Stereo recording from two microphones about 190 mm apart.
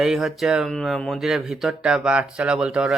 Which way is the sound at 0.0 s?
Centre (ahead or behind).